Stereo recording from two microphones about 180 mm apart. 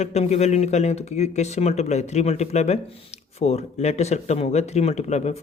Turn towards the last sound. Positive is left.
turn(degrees=40)  # may be behind; listen again after turning